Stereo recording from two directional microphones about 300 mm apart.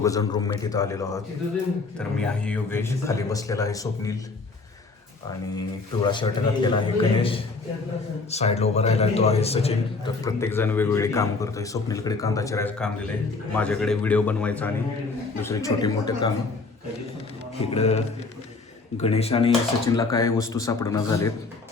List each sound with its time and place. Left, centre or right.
0.0 s a man's voice: centre
5.5 s a man's voice: centre
10.2 s a man's voice: centre
17.6 s speech: centre
19.0 s a man's voice: centre